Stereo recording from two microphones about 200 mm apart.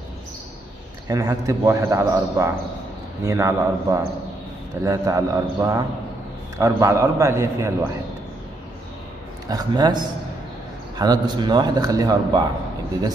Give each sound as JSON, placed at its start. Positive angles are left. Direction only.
{"t": 1.0, "sound": "a man's voice", "side_deg": -15}
{"t": 9.5, "sound": "a man's voice", "side_deg": -20}